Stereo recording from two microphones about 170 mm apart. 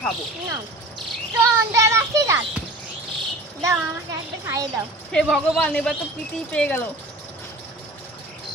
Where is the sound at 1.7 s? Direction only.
15° right (ahead or behind).